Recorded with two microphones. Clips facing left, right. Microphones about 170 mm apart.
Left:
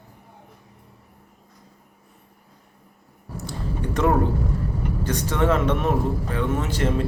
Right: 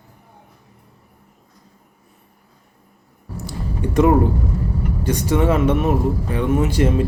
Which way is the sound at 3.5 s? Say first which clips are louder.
Right 3 dB; 10° right (ahead or behind).